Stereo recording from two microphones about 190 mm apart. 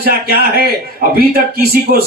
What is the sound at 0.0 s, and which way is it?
A man's voice, 50° right (ahead or behind).